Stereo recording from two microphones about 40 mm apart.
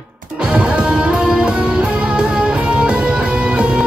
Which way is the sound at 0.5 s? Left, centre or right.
Right.